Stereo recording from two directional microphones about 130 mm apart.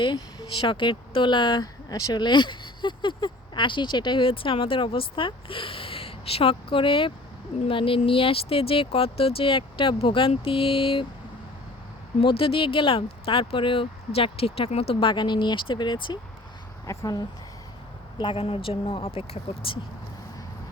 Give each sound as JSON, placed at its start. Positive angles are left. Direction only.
{"t": 0.0, "sound": "speech", "side_deg": 40}
{"t": 12.2, "sound": "speech", "side_deg": 45}
{"t": 16.8, "sound": "speech", "side_deg": 25}
{"t": 18.2, "sound": "speech", "side_deg": 40}